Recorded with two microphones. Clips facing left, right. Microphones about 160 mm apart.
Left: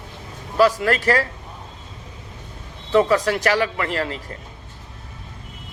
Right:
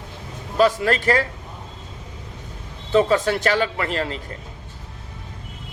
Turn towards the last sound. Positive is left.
turn(degrees=-25)  # may be behind; listen again after turning